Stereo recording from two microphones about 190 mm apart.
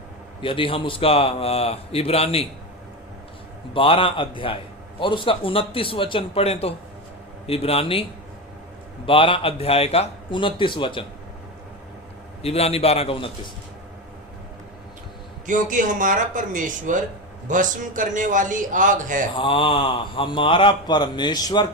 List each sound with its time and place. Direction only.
0.4 s a man's voice: 30° left (ahead or behind)
3.8 s a man's voice: 25° left (ahead or behind)
9.0 s speech: 30° left (ahead or behind)
12.4 s a man's voice: 30° left (ahead or behind)
15.4 s speech: 45° right (ahead or behind)
19.4 s speech: 25° left (ahead or behind)